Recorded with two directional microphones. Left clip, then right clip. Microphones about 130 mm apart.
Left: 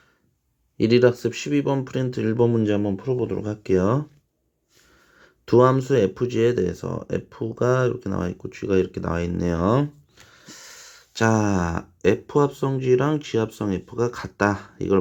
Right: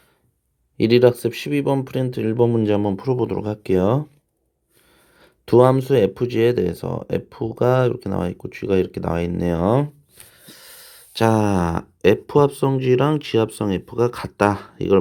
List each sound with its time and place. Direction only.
0.8 s speech: 30° right (ahead or behind)
5.2 s speech: 30° right (ahead or behind)
10.3 s wheeze: 15° right (ahead or behind)
11.1 s speech: 30° right (ahead or behind)